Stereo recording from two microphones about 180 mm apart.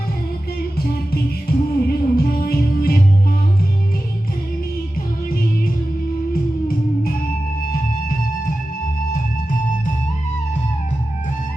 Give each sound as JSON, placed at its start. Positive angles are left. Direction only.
{"t": 0.8, "sound": "music", "side_deg": 60}
{"t": 6.3, "sound": "music", "side_deg": 55}
{"t": 9.1, "sound": "music", "side_deg": 50}